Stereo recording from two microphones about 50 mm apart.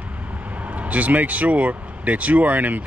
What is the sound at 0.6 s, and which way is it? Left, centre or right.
Speech, right.